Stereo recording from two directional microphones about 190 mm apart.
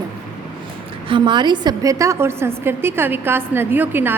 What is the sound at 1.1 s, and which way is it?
A woman's voice, 25° right (ahead or behind).